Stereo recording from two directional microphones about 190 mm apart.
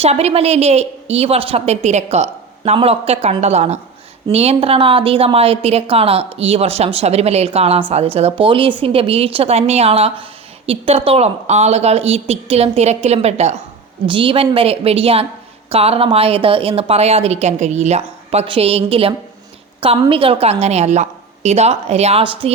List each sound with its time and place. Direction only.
0.0 s a woman's voice: 35° right (ahead or behind)